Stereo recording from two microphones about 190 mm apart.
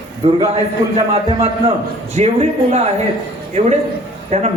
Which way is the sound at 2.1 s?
35° right (ahead or behind).